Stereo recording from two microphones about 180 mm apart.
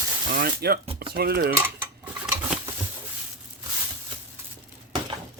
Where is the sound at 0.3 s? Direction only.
60° right (ahead or behind).